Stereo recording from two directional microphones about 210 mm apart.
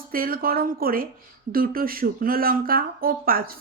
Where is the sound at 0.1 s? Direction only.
45° right (ahead or behind).